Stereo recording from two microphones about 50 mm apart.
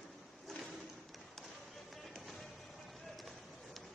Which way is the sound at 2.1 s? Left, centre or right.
Centre.